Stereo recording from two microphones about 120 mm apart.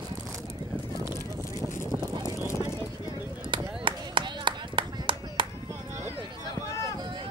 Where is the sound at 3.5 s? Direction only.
45° right (ahead or behind).